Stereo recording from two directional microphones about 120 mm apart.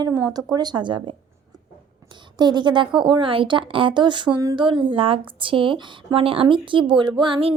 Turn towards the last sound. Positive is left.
turn(degrees=-50)  # may be behind; listen again after turning